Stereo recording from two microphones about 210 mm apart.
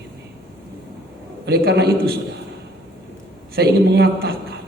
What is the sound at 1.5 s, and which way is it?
Speech, 50° right (ahead or behind).